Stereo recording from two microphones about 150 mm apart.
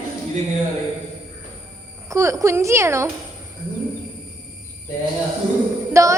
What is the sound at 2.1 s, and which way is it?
A child's voice, 20° right (ahead or behind).